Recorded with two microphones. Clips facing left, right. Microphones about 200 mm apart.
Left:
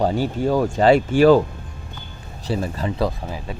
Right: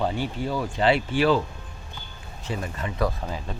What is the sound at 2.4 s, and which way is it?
Speech, 35° left (ahead or behind).